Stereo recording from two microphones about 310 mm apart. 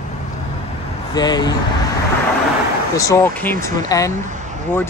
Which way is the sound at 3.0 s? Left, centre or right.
Centre.